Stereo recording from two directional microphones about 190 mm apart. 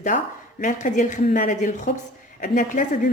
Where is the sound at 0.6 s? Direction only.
40° left (ahead or behind).